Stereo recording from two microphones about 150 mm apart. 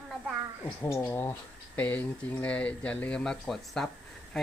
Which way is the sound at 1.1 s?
15° left (ahead or behind).